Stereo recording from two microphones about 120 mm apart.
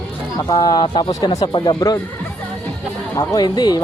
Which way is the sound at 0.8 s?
45° left (ahead or behind).